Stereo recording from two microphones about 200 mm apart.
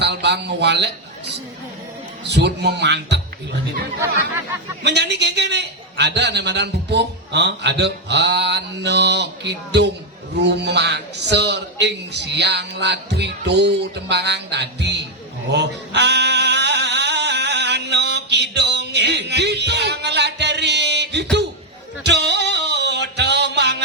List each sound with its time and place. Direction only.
0.0 s speech: 60° right (ahead or behind)
2.2 s a man's voice: 60° right (ahead or behind)
4.8 s a man's voice: 60° right (ahead or behind)
15.5 s male singing: 60° right (ahead or behind)
22.0 s a sound: 55° right (ahead or behind)